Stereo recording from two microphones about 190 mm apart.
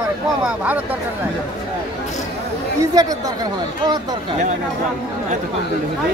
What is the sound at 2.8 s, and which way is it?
Speech, 20° right (ahead or behind).